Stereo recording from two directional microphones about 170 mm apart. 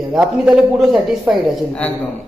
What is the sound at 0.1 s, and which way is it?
Speech, 5° right (ahead or behind).